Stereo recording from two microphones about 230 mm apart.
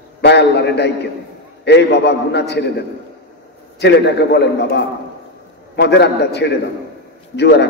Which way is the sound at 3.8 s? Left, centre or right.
Left.